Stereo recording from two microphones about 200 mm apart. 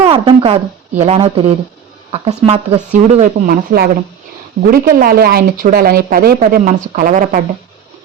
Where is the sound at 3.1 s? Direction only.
40° right (ahead or behind).